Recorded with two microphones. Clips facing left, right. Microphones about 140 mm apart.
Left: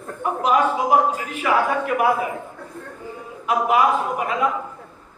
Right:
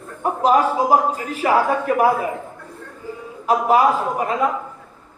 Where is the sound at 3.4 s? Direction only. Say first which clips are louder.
Right 3 dB; 35° right (ahead or behind).